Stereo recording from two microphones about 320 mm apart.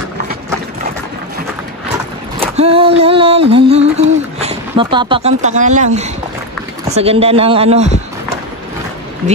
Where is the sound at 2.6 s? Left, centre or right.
Centre.